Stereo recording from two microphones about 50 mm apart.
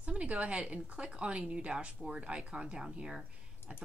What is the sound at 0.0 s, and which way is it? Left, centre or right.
Speech, right.